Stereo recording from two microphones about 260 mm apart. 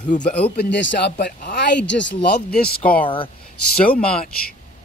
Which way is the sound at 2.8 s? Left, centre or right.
Centre.